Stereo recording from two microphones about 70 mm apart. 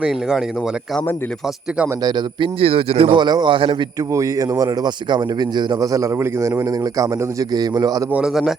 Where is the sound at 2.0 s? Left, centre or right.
Right.